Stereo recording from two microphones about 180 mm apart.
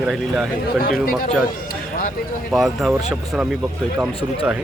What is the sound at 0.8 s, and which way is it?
Speech, 55° left (ahead or behind).